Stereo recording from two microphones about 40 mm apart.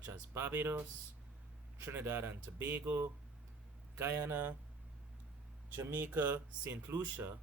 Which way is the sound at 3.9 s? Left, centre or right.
Right.